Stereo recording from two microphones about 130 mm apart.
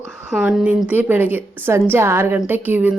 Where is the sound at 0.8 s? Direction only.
10° right (ahead or behind).